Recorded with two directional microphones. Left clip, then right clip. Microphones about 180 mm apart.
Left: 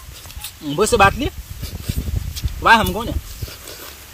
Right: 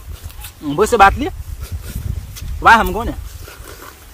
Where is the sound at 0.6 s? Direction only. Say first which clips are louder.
Right 4 dB; 10° right (ahead or behind).